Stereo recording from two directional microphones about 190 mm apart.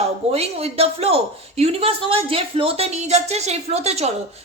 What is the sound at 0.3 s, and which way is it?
A woman's voice, 30° right (ahead or behind).